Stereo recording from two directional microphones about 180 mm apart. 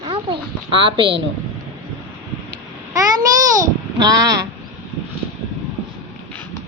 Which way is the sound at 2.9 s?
20° right (ahead or behind).